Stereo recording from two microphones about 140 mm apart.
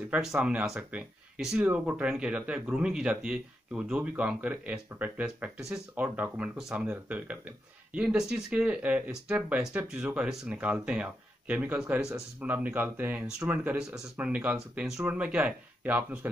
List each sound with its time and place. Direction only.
0.1 s speech: 5° right (ahead or behind)